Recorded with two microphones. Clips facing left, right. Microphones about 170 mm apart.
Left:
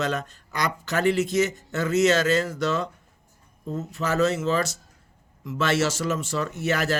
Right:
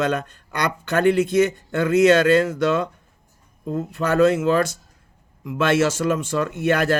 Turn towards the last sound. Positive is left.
turn(degrees=-55)  # may be behind; listen again after turning